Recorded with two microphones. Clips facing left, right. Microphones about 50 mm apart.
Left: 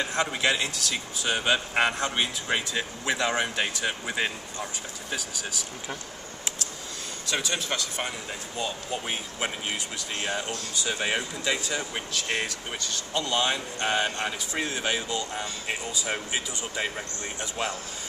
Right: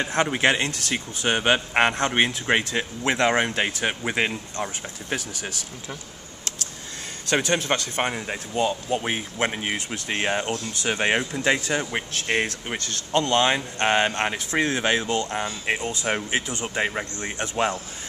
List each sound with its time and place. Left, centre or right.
0.0 s speech: right
7.2 s speech: right